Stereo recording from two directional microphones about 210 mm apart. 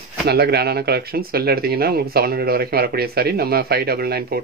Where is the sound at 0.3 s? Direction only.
50° right (ahead or behind).